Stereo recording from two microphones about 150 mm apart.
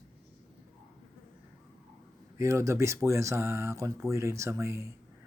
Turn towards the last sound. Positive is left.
turn(degrees=-20)  # may be behind; listen again after turning